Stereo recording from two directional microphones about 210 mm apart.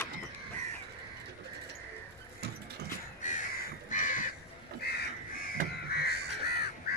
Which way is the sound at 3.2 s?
35° left (ahead or behind).